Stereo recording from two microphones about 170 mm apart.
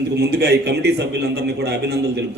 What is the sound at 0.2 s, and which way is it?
A man's voice, 75° right (ahead or behind).